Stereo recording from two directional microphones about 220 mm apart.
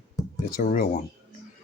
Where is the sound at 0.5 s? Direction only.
40° left (ahead or behind).